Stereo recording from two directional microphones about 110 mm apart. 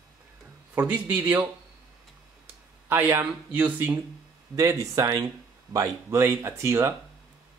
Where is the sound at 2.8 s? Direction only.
20° right (ahead or behind).